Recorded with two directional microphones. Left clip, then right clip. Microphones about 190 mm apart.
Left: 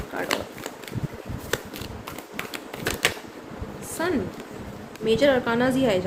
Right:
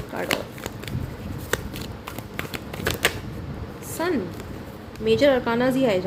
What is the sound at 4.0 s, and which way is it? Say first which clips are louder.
Speech: right 1 dB; 15° right (ahead or behind).